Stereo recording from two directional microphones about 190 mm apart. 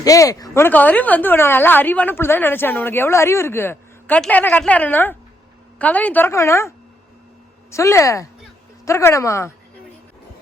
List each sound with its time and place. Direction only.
0.0 s a woman's voice: 20° left (ahead or behind)